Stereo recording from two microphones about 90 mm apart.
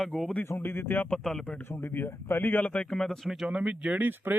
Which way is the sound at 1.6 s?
25° left (ahead or behind).